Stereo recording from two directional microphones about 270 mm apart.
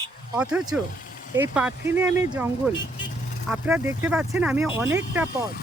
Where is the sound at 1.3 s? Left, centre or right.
Centre.